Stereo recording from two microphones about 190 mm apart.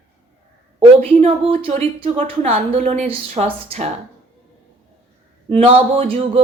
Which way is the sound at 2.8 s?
35° right (ahead or behind).